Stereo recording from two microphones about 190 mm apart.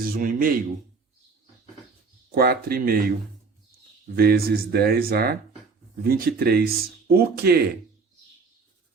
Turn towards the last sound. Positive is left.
turn(degrees=-55)  # may be behind; listen again after turning